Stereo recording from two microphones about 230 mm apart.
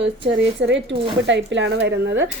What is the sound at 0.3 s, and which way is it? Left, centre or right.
Speech, right.